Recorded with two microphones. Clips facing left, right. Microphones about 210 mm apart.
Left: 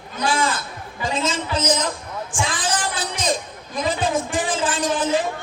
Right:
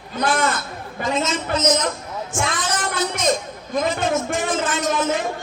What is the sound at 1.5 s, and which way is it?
Music, 30° left (ahead or behind).